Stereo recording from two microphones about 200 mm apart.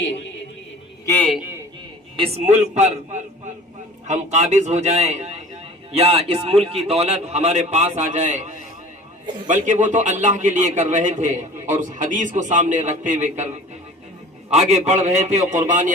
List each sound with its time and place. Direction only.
1.0 s a man's voice: 10° left (ahead or behind)
1.3 s a man's voice: 10° right (ahead or behind)
2.1 s a man's voice: 35° right (ahead or behind)
14.5 s a man's voice: 35° right (ahead or behind)